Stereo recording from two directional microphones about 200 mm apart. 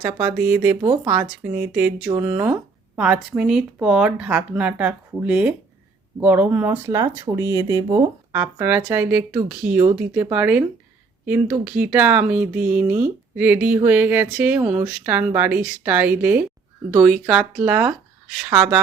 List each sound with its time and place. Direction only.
0.0 s speech: 10° right (ahead or behind)
0.8 s speech: 20° right (ahead or behind)
1.1 s speech: 10° right (ahead or behind)
8.3 s speech: 10° right (ahead or behind)